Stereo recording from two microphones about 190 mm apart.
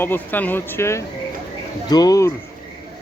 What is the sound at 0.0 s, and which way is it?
Speech, 10° left (ahead or behind).